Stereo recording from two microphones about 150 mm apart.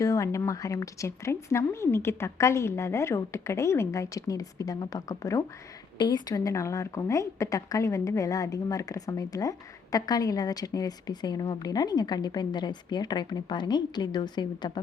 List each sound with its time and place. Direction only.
0.0 s a woman's voice: 20° left (ahead or behind)